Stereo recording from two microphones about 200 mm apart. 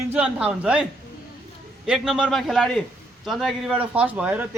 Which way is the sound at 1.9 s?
Centre (ahead or behind).